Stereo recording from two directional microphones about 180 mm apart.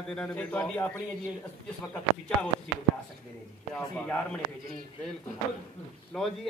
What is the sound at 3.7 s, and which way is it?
Speech, 5° left (ahead or behind).